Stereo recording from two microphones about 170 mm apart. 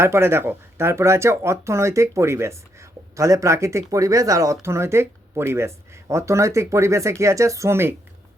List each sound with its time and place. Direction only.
0.0 s speech: 15° right (ahead or behind)